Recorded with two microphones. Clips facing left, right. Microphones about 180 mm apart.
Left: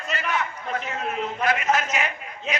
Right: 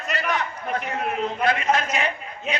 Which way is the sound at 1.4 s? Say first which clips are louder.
Even; 35° right (ahead or behind).